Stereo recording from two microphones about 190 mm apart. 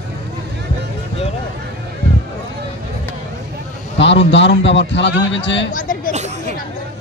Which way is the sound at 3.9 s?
70° left (ahead or behind).